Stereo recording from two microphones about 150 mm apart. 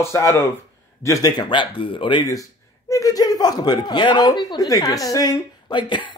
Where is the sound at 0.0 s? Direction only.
20° left (ahead or behind).